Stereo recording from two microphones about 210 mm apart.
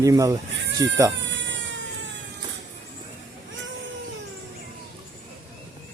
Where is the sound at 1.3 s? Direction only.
60° right (ahead or behind).